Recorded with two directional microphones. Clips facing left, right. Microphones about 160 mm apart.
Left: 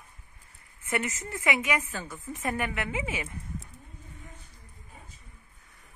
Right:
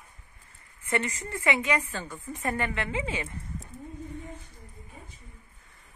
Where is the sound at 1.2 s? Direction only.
15° left (ahead or behind).